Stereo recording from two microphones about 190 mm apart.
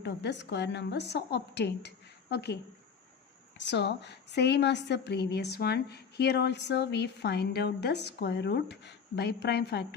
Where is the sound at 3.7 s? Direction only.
65° left (ahead or behind).